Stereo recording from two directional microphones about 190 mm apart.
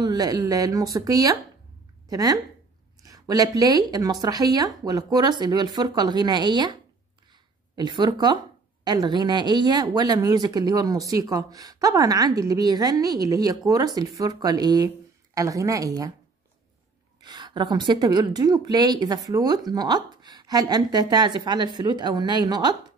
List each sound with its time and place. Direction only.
0.0 s a woman's voice: 20° right (ahead or behind)
17.2 s a woman's voice: 20° right (ahead or behind)